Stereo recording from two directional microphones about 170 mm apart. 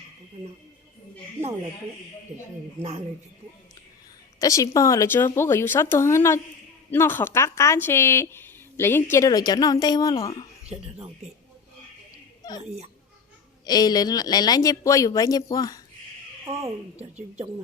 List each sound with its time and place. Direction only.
4.4 s a woman's voice: 20° left (ahead or behind)
10.7 s speech: 35° right (ahead or behind)
13.7 s speech: 25° left (ahead or behind)